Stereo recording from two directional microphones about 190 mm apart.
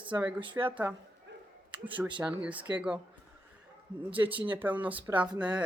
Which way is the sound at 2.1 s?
5° right (ahead or behind).